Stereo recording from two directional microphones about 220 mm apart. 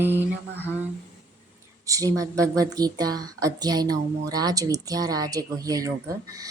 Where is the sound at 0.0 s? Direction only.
10° right (ahead or behind).